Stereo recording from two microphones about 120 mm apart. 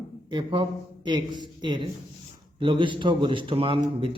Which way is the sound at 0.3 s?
40° right (ahead or behind).